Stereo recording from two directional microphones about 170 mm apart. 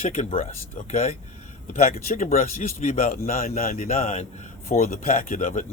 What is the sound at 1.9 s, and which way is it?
Speech, 50° left (ahead or behind).